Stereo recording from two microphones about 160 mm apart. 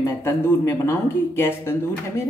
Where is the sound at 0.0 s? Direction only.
15° left (ahead or behind).